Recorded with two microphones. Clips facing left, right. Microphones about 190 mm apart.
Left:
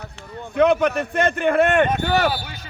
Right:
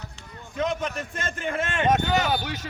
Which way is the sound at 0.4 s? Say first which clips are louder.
Left 11 dB; 65° left (ahead or behind).